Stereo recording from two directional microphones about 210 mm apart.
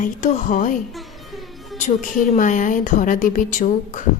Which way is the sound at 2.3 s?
35° left (ahead or behind).